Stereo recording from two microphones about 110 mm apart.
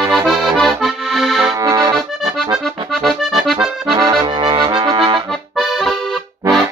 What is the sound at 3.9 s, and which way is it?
Accordion, 35° right (ahead or behind).